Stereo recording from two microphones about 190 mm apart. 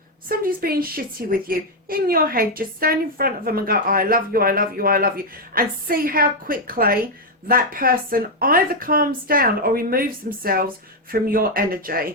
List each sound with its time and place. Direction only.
0.3 s a woman's voice: 50° right (ahead or behind)